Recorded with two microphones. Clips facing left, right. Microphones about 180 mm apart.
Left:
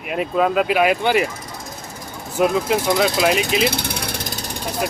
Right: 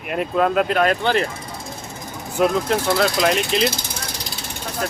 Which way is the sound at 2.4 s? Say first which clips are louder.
Left 1 dB; 5° left (ahead or behind).